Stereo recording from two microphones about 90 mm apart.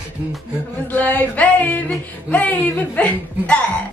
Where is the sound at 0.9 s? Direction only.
20° left (ahead or behind).